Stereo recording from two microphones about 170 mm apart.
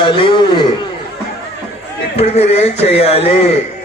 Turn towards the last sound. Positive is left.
turn(degrees=35)  # may be behind; listen again after turning